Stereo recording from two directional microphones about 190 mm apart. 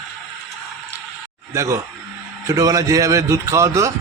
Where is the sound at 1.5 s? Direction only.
15° right (ahead or behind).